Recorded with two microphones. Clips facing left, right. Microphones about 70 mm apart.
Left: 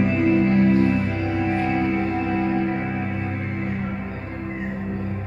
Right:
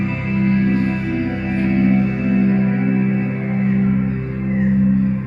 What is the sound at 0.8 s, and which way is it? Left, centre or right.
Music, centre.